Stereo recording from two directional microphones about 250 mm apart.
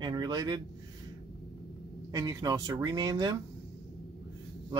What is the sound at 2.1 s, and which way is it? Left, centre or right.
Speech, centre.